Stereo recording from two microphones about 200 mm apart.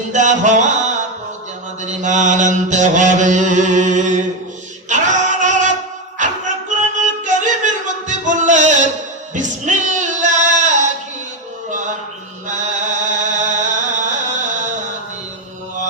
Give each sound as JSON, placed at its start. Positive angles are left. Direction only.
{"t": 0.1, "sound": "chant", "side_deg": -35}
{"t": 4.9, "sound": "singing", "side_deg": -40}
{"t": 6.1, "sound": "music", "side_deg": -40}
{"t": 9.3, "sound": "a sound", "side_deg": -40}
{"t": 12.5, "sound": "music", "side_deg": -40}